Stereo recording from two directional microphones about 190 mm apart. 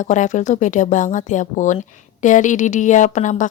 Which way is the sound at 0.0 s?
40° left (ahead or behind).